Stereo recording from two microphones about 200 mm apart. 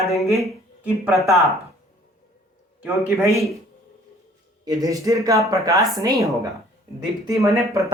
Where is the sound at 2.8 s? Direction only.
10° right (ahead or behind).